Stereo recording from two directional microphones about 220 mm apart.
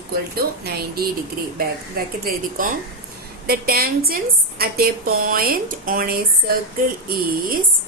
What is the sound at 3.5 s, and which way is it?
A woman's voice, 45° right (ahead or behind).